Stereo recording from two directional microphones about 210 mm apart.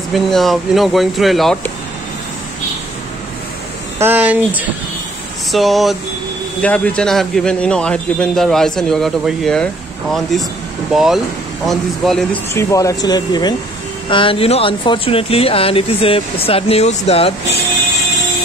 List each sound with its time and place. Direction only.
0.1 s speech: centre (ahead or behind)
4.0 s speech: 10° right (ahead or behind)
12.5 s speech: 15° left (ahead or behind); by 17.3 s 30° left (ahead or behind)